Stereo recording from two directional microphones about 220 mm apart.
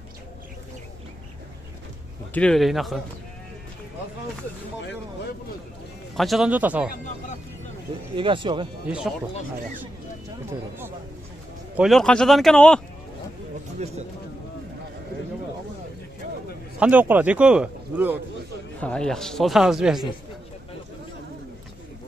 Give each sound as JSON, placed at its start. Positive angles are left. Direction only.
{"t": 2.3, "sound": "speech", "side_deg": 5}
{"t": 6.1, "sound": "speech", "side_deg": 0}
{"t": 8.2, "sound": "speech", "side_deg": -25}
{"t": 8.8, "sound": "speech", "side_deg": -5}
{"t": 11.7, "sound": "speech", "side_deg": 0}
{"t": 16.8, "sound": "speech", "side_deg": -10}
{"t": 18.8, "sound": "speech", "side_deg": 5}